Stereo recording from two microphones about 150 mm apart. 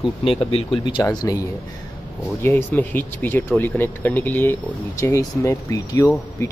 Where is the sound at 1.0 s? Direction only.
25° left (ahead or behind).